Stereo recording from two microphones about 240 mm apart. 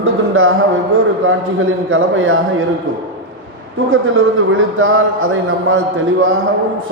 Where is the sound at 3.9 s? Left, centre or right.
Right.